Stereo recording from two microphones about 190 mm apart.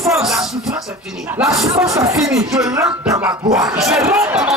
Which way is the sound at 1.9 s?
15° right (ahead or behind).